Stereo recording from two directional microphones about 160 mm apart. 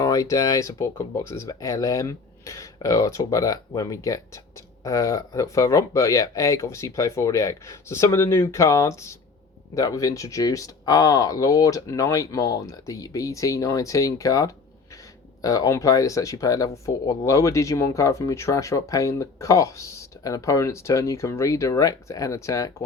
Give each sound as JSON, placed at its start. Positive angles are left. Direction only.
{"t": 0.0, "sound": "speech", "side_deg": 20}